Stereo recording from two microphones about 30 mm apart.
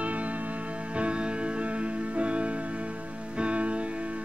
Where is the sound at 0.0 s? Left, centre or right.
Right.